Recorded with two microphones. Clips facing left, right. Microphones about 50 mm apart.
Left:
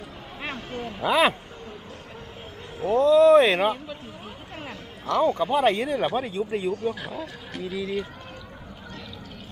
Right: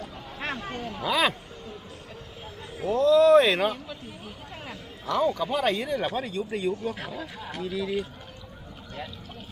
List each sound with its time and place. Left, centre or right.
0.8 s speech: left
2.8 s a man's voice: left
4.7 s a sound: left
5.2 s speech: left